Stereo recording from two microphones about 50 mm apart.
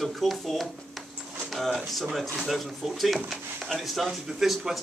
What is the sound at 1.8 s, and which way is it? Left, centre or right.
Speech, centre.